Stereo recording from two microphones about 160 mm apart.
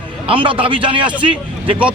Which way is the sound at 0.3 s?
35° right (ahead or behind).